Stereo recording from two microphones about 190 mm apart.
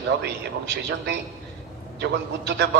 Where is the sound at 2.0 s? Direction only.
60° right (ahead or behind).